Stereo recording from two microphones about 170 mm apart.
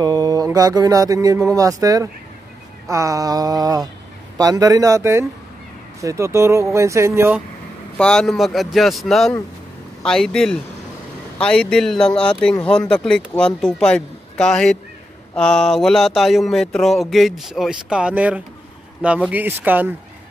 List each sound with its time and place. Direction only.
0.0 s a sound: 20° right (ahead or behind)
5.9 s speech: 15° right (ahead or behind)
8.0 s speech: 5° left (ahead or behind)